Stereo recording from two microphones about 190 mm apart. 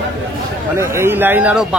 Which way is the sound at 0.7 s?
15° right (ahead or behind).